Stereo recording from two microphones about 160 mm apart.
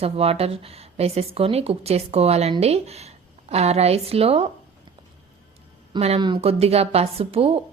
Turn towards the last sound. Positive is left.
turn(degrees=-35)  # may be behind; listen again after turning